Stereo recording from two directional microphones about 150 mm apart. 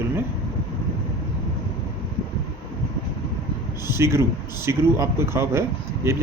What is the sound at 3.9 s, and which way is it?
Speech, 20° right (ahead or behind).